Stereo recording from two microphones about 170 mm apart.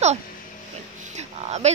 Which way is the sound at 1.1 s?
40° right (ahead or behind).